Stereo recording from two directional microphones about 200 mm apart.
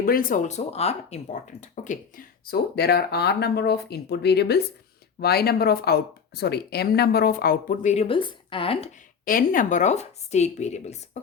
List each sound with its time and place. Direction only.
0.0 s speech: 45° left (ahead or behind); by 8.9 s 30° left (ahead or behind)
9.2 s a woman's voice: 45° left (ahead or behind)